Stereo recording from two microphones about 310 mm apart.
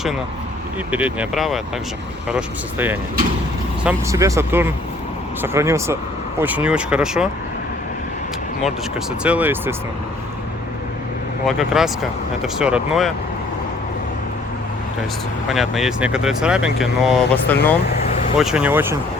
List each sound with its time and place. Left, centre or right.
0.9 s speech: centre
9.2 s speech: centre
11.4 s speech: centre
15.4 s speech: centre
17.9 s vehicle: left
18.3 s speech: centre